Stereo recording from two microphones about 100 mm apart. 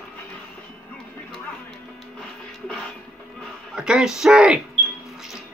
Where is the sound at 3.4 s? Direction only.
5° right (ahead or behind).